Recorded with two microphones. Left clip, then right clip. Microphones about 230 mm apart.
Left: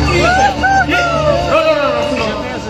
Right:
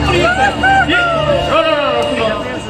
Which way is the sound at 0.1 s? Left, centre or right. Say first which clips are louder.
Left 1 dB; left.